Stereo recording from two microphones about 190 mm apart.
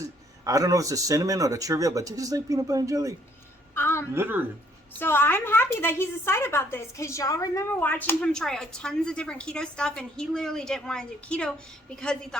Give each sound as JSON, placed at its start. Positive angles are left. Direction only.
{"t": 0.0, "sound": "speech", "side_deg": -15}
{"t": 3.8, "sound": "a sound", "side_deg": 15}
{"t": 4.1, "sound": "speech", "side_deg": -10}
{"t": 4.9, "sound": "a woman's voice", "side_deg": 10}